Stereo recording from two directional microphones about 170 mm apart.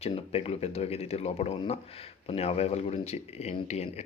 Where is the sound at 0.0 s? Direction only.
35° left (ahead or behind).